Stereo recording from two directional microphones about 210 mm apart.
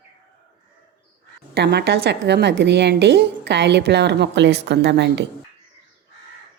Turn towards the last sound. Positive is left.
turn(degrees=-55)  # may be behind; listen again after turning